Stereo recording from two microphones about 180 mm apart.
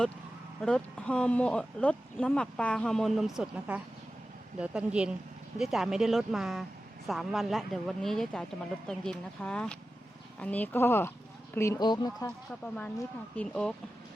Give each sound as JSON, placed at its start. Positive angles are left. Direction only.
{"t": 0.6, "sound": "speech", "side_deg": 5}
{"t": 12.6, "sound": "speech", "side_deg": 5}